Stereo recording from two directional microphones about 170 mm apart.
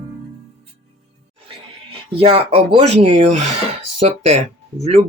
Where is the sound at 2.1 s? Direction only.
35° right (ahead or behind).